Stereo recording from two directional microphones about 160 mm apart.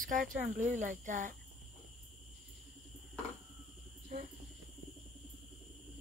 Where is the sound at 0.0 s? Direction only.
60° right (ahead or behind).